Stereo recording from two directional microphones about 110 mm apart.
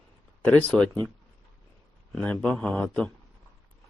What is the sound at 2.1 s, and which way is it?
Speech, 10° left (ahead or behind).